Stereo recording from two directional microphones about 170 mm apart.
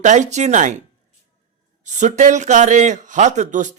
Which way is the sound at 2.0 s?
45° right (ahead or behind).